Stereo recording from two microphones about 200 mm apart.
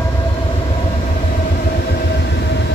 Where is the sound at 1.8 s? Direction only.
55° left (ahead or behind).